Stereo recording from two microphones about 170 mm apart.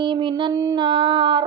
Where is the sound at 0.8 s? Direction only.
25° right (ahead or behind).